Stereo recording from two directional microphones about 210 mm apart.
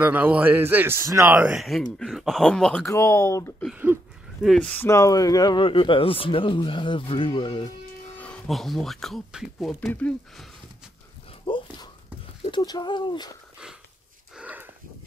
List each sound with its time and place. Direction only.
0.0 s a man's voice: 5° right (ahead or behind)
2.9 s speech: 15° left (ahead or behind)
3.6 s speech: 10° right (ahead or behind); by 7.7 s 25° left (ahead or behind)
8.2 s speech: 5° left (ahead or behind)
11.4 s a sound: 20° left (ahead or behind)
12.4 s speech: 20° left (ahead or behind)
14.3 s sniff: 5° right (ahead or behind)